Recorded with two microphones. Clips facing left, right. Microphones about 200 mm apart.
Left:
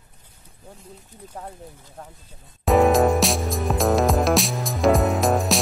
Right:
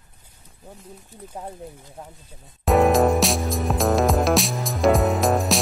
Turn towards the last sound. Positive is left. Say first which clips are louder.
# even
turn(degrees=0)  # may be behind; listen again after turning